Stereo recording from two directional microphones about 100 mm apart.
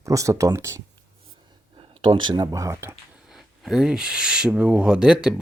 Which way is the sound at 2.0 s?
55° right (ahead or behind).